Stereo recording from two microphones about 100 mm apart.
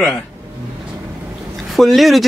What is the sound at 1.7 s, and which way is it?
Speech, centre (ahead or behind).